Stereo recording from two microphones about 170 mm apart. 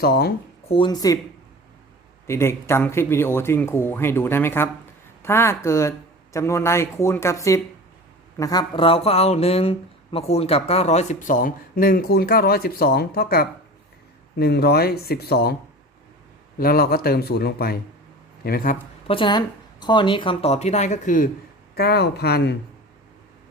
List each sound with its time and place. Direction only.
0.0 s speech: 65° left (ahead or behind)
0.7 s speech: 25° left (ahead or behind)
2.2 s speech: 15° left (ahead or behind); by 15.5 s 70° left (ahead or behind)
16.6 s speech: 65° left (ahead or behind)
19.0 s a woman's voice: 30° left (ahead or behind); by 21.2 s 50° left (ahead or behind)
21.8 s speech: 70° left (ahead or behind)